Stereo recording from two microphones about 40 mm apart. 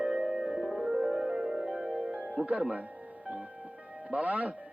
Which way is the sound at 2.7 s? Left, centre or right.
Right.